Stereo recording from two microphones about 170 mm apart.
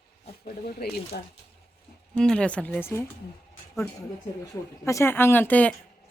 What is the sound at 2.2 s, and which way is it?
Speech, 5° left (ahead or behind).